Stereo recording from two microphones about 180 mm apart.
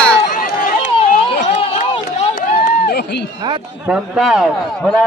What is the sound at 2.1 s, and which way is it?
Run, 40° left (ahead or behind).